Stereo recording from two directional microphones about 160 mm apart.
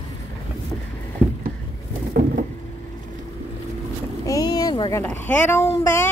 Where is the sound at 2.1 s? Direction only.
75° right (ahead or behind).